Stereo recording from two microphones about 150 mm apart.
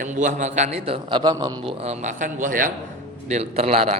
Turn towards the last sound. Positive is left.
turn(degrees=-40)  # may be behind; listen again after turning